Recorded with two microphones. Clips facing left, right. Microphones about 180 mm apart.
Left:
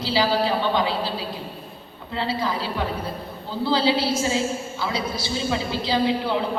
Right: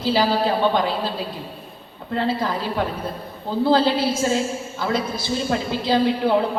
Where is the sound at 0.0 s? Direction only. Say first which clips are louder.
Right 2 dB; 50° right (ahead or behind).